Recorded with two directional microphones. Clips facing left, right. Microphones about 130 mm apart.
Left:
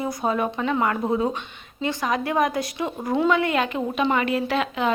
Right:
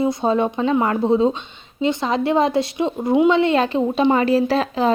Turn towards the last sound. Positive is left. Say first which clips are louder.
# right 5 dB
turn(degrees=-35)  # may be behind; listen again after turning